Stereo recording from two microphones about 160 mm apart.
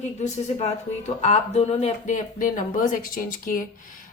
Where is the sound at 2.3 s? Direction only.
60° left (ahead or behind).